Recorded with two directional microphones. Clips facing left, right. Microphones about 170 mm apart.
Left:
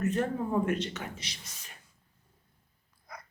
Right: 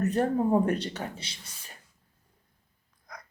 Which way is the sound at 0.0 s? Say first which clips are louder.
Right 4 dB; 35° right (ahead or behind).